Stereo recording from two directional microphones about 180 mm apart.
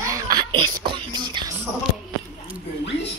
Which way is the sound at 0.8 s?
25° right (ahead or behind).